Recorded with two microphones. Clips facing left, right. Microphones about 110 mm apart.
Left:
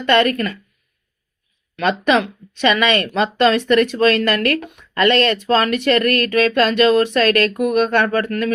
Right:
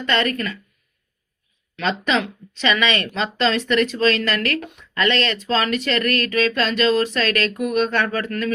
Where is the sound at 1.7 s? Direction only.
50° left (ahead or behind).